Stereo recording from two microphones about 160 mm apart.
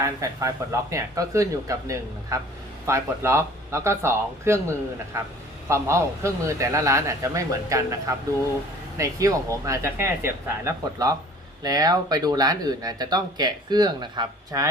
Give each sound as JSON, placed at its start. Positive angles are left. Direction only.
{"t": 0.2, "sound": "speech", "side_deg": -20}
{"t": 5.6, "sound": "speech", "side_deg": -15}
{"t": 9.0, "sound": "speech", "side_deg": -20}